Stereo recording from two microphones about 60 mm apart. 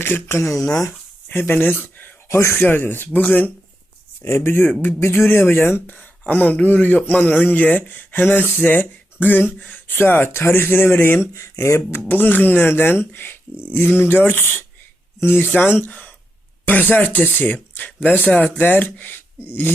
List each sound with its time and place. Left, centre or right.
0.0 s speech: left
2.3 s speech: left
2.6 s speech: left
4.2 s speech: left
4.6 s speech: left
4.9 s speech: left